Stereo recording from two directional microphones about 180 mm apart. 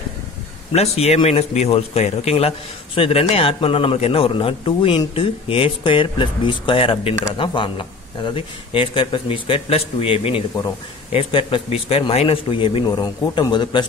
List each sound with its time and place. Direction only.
0.7 s a man's voice: 35° left (ahead or behind)